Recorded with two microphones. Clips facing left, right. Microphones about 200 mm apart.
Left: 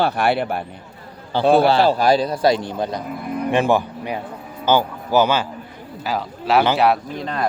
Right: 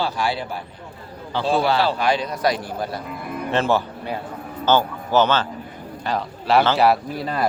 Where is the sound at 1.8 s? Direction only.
40° left (ahead or behind).